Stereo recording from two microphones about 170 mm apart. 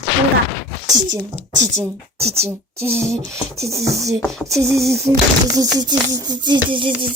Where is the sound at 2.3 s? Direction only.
15° right (ahead or behind).